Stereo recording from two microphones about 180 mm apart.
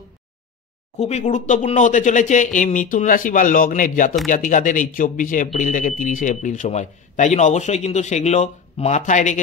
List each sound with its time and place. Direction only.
0.9 s speech: 35° left (ahead or behind)